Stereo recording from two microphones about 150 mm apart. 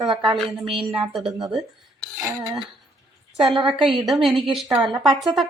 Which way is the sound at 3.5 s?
35° right (ahead or behind).